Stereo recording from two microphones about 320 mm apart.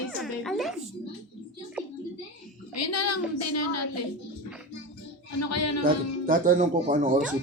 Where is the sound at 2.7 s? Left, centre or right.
Left.